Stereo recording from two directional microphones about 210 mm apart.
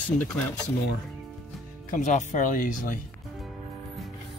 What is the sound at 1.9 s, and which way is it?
Speech, 35° left (ahead or behind).